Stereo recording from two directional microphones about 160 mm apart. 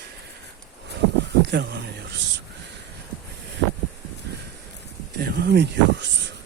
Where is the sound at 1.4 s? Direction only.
90° right.